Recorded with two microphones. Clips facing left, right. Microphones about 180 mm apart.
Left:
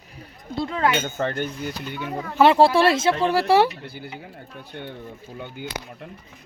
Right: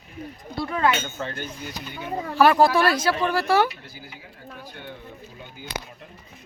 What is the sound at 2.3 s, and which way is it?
Speech, 25° left (ahead or behind).